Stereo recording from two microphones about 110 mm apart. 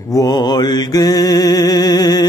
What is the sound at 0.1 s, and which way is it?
Mantra, 40° left (ahead or behind).